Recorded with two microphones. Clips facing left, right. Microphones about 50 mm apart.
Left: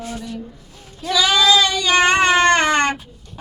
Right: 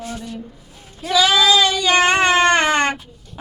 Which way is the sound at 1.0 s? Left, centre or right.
Centre.